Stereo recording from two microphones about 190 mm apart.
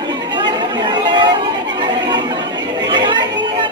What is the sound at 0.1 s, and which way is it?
Chatter, 25° right (ahead or behind).